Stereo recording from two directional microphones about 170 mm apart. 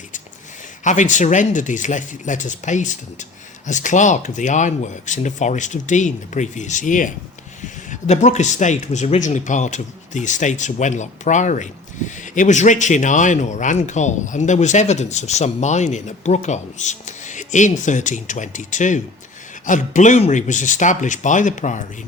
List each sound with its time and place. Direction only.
0.9 s speech: 45° left (ahead or behind)